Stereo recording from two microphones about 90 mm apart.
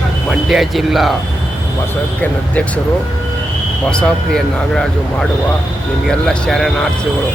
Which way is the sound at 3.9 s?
10° left (ahead or behind).